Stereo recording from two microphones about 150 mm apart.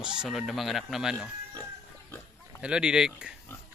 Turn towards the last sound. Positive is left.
turn(degrees=-5)  # may be behind; listen again after turning